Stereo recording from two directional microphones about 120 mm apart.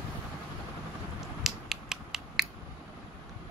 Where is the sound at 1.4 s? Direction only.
5° right (ahead or behind).